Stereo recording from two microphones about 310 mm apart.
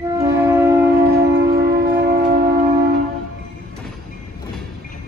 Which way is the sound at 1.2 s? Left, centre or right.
Right.